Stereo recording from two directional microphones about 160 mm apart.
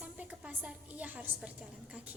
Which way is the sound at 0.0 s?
10° right (ahead or behind).